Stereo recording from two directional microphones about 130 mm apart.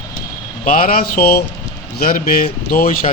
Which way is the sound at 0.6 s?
90° left.